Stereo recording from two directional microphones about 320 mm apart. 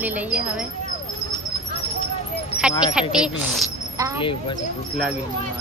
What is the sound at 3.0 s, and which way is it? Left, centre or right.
A woman's voice, centre.